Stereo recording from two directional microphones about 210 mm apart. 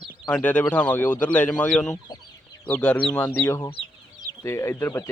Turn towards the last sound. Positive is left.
turn(degrees=15)  # may be behind; listen again after turning